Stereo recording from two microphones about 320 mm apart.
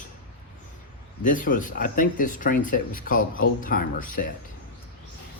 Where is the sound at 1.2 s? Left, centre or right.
Left.